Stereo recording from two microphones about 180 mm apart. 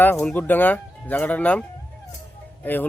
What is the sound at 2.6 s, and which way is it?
Speech, 10° left (ahead or behind).